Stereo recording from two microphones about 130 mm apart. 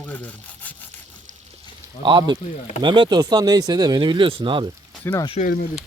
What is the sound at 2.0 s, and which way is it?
Speech, 35° right (ahead or behind).